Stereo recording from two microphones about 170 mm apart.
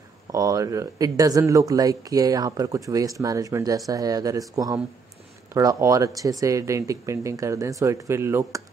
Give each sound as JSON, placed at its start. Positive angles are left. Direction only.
{"t": 0.3, "sound": "speech", "side_deg": -20}